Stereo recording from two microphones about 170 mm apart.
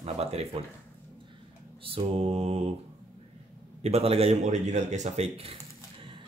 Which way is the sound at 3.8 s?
35° right (ahead or behind).